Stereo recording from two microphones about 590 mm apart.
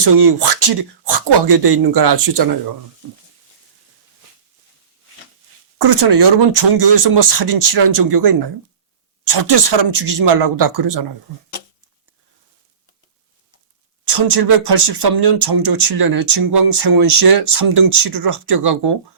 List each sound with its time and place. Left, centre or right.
0.0 s speech: right
5.9 s speech: right
9.3 s speech: right
14.1 s speech: right